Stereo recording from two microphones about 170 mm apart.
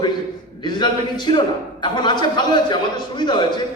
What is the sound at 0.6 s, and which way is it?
A man's voice, 25° left (ahead or behind).